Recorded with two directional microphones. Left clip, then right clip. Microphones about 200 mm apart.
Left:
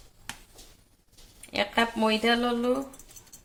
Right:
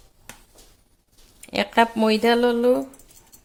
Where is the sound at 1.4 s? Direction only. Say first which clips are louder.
Right 7 dB; 55° right (ahead or behind).